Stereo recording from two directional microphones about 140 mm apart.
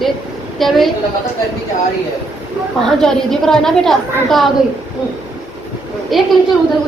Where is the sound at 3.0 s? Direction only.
5° left (ahead or behind).